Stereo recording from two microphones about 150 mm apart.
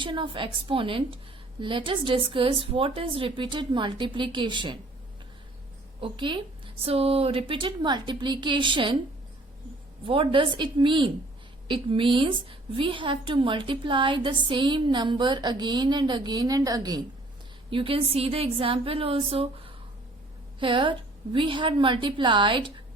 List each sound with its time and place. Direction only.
0.0 s a woman's voice: 35° right (ahead or behind)
6.0 s a woman's voice: 30° right (ahead or behind)
10.0 s a woman's voice: 35° right (ahead or behind)
17.7 s a woman's voice: 35° right (ahead or behind)